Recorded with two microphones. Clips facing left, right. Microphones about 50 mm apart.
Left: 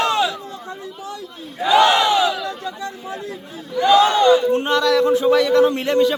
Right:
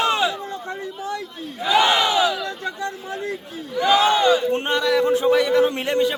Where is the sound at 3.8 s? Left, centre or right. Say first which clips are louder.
Left 3 dB; centre.